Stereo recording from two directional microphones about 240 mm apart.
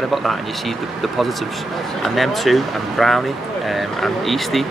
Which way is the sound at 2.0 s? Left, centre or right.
Centre.